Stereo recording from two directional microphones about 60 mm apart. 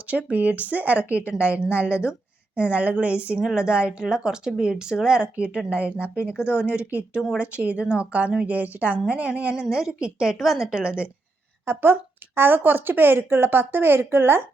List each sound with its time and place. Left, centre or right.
0.1 s speech: right
11.6 s speech: right